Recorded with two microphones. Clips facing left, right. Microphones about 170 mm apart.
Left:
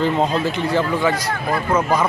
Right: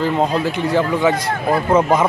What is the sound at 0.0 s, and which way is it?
A man's voice, 10° right (ahead or behind).